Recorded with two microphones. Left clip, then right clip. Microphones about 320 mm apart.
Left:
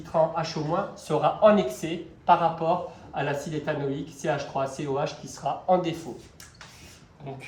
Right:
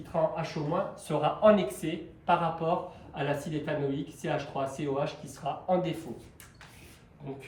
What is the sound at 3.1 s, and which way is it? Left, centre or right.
Speech, centre.